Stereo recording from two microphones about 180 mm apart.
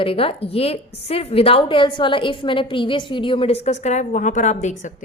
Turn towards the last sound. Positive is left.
turn(degrees=40)  # may be behind; listen again after turning